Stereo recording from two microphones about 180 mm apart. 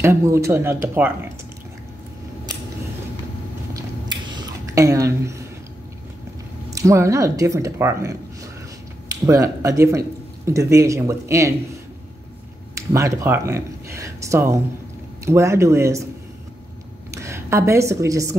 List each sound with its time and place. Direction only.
0.0 s speech: 15° right (ahead or behind)
3.7 s chewing: 25° right (ahead or behind)
6.7 s speech: 15° right (ahead or behind)
12.7 s speech: 15° right (ahead or behind)
17.1 s a woman's voice: 15° right (ahead or behind)